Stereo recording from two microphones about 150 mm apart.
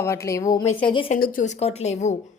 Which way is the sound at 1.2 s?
65° left (ahead or behind).